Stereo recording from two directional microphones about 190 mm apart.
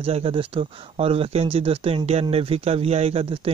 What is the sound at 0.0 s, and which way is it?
Speech, 30° right (ahead or behind).